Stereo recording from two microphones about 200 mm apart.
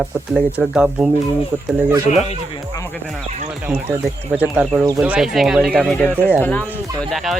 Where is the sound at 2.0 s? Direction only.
35° left (ahead or behind).